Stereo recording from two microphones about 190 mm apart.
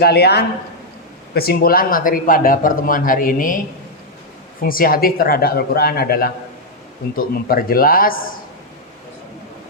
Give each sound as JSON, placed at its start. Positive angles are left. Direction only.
{"t": 0.0, "sound": "a man's voice", "side_deg": 55}
{"t": 4.6, "sound": "speech", "side_deg": 50}